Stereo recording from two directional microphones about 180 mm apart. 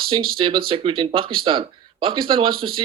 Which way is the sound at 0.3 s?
30° right (ahead or behind).